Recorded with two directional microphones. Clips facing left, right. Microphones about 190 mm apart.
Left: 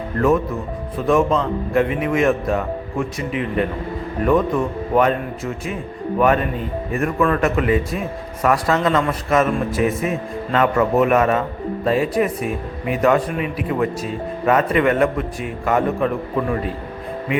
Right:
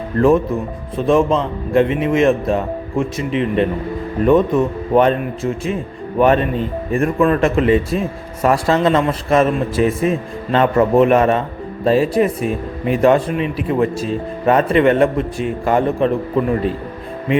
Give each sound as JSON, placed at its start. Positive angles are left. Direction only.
{"t": 0.9, "sound": "speech", "side_deg": -25}